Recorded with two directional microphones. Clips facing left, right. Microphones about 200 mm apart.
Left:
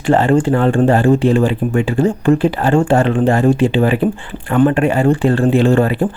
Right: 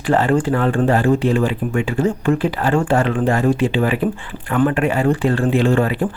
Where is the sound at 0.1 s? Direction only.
25° left (ahead or behind).